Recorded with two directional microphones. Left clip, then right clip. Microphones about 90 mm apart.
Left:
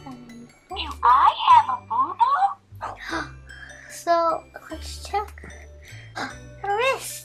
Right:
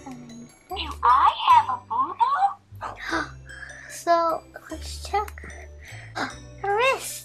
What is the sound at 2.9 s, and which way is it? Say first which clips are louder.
Music: right 4 dB; 10° right (ahead or behind).